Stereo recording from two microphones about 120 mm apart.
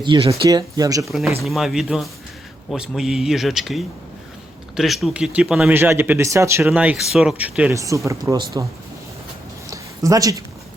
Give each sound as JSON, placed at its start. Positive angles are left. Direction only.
{"t": 0.0, "sound": "speech", "side_deg": -40}
{"t": 1.0, "sound": "speech", "side_deg": 0}
{"t": 5.7, "sound": "speech", "side_deg": -20}
{"t": 6.7, "sound": "speech", "side_deg": -10}
{"t": 7.7, "sound": "speech", "side_deg": -25}
{"t": 9.6, "sound": "a sound", "side_deg": -30}